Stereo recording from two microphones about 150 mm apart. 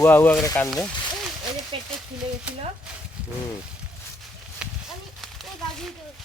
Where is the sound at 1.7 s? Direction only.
35° right (ahead or behind).